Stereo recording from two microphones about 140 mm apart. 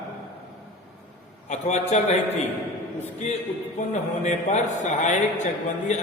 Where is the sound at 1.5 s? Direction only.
55° left (ahead or behind).